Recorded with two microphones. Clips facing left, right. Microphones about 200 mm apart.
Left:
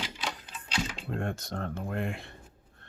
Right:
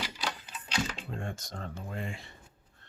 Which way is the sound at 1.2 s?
60° left (ahead or behind).